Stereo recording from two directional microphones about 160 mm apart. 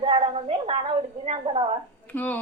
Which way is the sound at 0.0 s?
35° right (ahead or behind).